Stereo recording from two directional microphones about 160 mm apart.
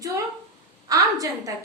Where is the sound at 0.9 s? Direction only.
20° right (ahead or behind).